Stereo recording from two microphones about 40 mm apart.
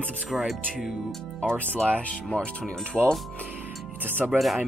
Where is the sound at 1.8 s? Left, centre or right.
Left.